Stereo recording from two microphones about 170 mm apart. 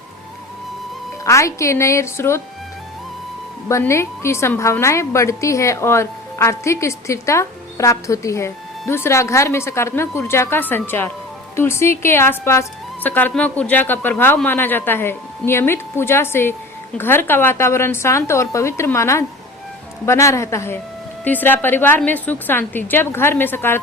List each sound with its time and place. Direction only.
1.2 s a woman's voice: 20° left (ahead or behind)
3.7 s a woman's voice: 15° left (ahead or behind)